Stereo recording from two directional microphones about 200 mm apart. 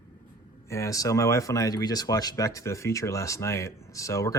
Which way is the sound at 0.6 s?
15° left (ahead or behind).